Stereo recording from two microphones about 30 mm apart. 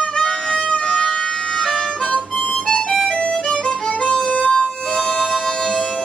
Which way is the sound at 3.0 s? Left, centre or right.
Left.